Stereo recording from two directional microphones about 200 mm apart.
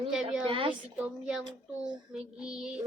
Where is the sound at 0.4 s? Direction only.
25° right (ahead or behind).